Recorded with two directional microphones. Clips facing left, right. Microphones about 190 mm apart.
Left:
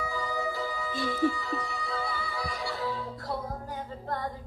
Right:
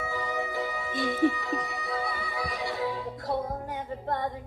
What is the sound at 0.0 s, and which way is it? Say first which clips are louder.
Music: even; 20° right (ahead or behind).